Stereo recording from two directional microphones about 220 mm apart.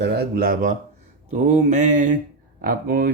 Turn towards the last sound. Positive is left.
turn(degrees=-40)  # may be behind; listen again after turning